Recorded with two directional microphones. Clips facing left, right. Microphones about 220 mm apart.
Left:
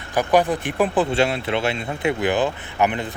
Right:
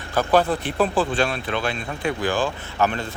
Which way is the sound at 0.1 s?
15° left (ahead or behind).